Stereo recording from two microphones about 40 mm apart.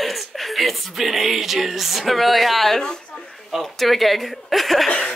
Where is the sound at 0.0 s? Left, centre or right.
Centre.